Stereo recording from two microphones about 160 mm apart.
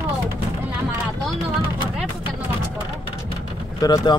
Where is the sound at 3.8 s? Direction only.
25° left (ahead or behind).